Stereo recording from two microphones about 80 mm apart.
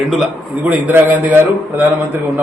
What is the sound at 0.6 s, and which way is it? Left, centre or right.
A man's voice, right.